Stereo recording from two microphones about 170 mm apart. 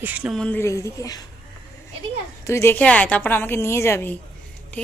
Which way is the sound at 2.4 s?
15° left (ahead or behind).